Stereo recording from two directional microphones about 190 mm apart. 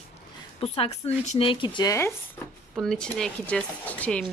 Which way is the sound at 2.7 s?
5° left (ahead or behind).